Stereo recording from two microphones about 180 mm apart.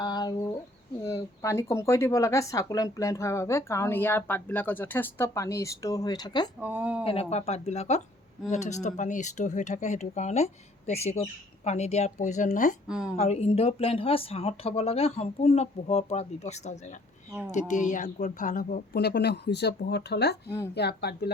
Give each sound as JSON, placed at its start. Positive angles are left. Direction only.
{"t": 0.0, "sound": "bird", "side_deg": 25}
{"t": 1.0, "sound": "speech", "side_deg": 15}
{"t": 6.6, "sound": "speech", "side_deg": -10}
{"t": 7.0, "sound": "speech", "side_deg": 35}
{"t": 12.9, "sound": "a woman's voice", "side_deg": -5}
{"t": 13.1, "sound": "speech", "side_deg": 35}